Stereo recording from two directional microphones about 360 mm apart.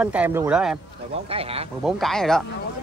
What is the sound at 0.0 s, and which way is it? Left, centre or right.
Speech, centre.